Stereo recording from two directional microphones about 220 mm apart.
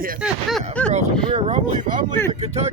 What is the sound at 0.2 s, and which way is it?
Speech, centre (ahead or behind).